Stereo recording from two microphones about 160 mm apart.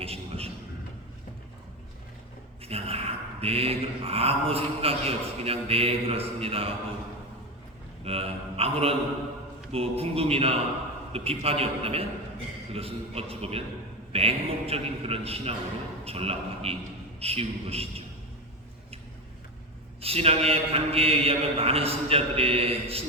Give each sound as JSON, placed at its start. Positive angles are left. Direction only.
{"t": 0.0, "sound": "a sound", "side_deg": -40}
{"t": 2.6, "sound": "mantra", "side_deg": -40}
{"t": 8.0, "sound": "a man's voice", "side_deg": -40}
{"t": 9.7, "sound": "mantra", "side_deg": -40}
{"t": 20.0, "sound": "mantra", "side_deg": -40}